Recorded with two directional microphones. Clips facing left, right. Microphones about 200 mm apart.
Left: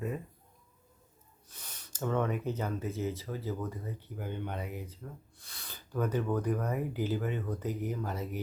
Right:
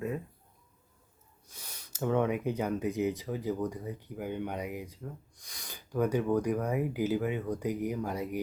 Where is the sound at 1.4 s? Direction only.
10° right (ahead or behind).